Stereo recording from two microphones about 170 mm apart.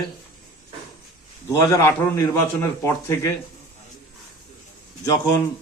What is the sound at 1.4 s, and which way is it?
A man's voice, 20° left (ahead or behind).